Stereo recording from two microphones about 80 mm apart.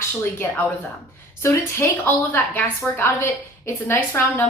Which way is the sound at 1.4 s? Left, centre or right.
Left.